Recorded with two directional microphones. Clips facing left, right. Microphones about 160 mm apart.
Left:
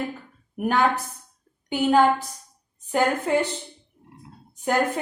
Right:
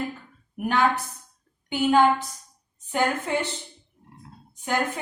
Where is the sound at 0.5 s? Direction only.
50° left (ahead or behind).